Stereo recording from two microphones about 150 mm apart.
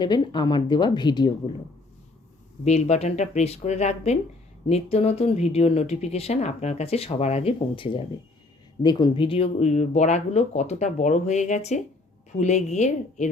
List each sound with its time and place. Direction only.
0.0 s speech: 30° left (ahead or behind)
2.6 s speech: 45° left (ahead or behind)